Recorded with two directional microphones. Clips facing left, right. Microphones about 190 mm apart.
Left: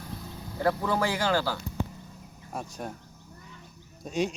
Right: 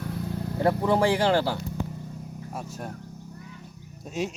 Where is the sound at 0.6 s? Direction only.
25° right (ahead or behind).